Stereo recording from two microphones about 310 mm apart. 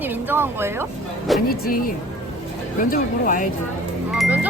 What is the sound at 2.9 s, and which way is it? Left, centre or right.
Speech, left.